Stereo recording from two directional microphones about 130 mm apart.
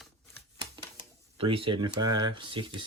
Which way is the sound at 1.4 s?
45° right (ahead or behind).